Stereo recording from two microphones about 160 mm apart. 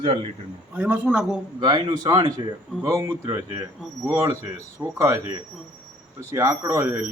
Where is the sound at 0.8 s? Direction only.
10° right (ahead or behind).